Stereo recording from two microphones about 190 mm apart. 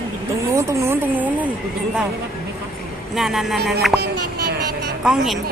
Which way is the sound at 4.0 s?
55° right (ahead or behind).